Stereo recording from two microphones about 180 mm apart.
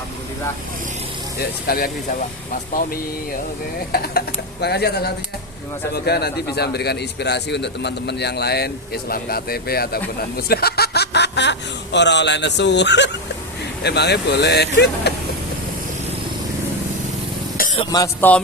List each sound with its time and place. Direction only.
1.4 s a man's voice: 55° left (ahead or behind)
4.6 s a man's voice: 65° left (ahead or behind)
17.7 s speech: 20° left (ahead or behind)
18.2 s music: 10° left (ahead or behind)